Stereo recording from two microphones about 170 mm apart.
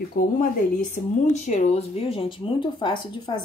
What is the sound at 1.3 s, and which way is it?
Speech, 40° left (ahead or behind).